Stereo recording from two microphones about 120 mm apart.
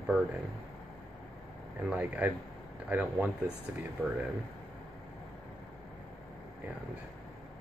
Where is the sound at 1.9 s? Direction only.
15° right (ahead or behind).